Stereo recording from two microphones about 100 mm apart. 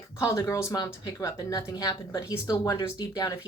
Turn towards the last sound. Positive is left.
turn(degrees=40)  # may be behind; listen again after turning